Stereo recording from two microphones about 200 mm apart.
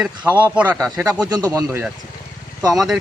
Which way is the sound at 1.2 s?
20° right (ahead or behind).